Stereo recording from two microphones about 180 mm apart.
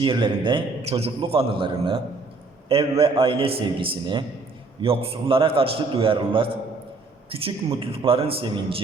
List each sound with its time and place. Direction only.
0.0 s a man's voice: 25° right (ahead or behind)